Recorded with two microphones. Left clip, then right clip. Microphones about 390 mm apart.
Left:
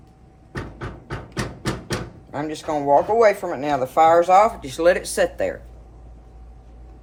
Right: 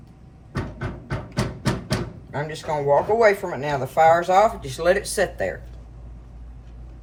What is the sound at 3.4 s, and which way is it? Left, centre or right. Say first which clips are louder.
Speech: left 3 dB; centre.